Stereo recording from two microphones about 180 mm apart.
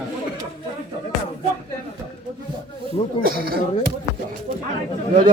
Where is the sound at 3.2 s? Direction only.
55° right (ahead or behind).